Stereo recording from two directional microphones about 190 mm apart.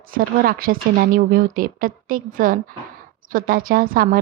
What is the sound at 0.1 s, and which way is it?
A woman's voice, 50° right (ahead or behind).